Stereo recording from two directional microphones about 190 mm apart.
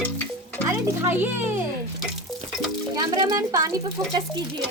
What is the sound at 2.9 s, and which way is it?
Speech, 20° right (ahead or behind).